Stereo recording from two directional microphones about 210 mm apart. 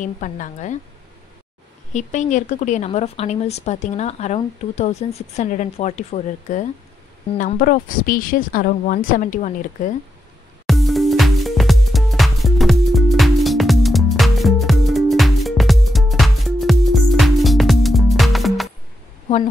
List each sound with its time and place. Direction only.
0.0 s speech: 35° left (ahead or behind)
2.0 s speech: 35° left (ahead or behind)
10.7 s music: centre (ahead or behind)